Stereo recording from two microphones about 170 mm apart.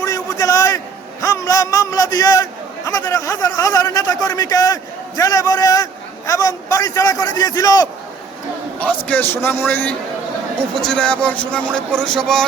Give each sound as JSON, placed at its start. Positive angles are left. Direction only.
{"t": 0.0, "sound": "a sound", "side_deg": 20}
{"t": 1.2, "sound": "a man's voice", "side_deg": 20}
{"t": 8.8, "sound": "a man's voice", "side_deg": 10}